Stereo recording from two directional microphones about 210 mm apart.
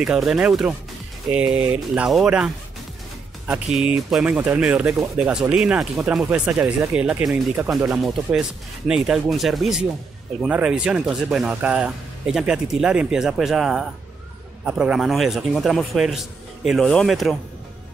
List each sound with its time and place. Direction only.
0.0 s speech: centre (ahead or behind)